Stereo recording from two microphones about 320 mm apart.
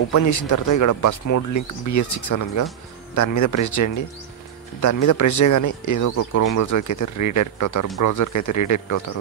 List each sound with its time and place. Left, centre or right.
0.1 s speech: left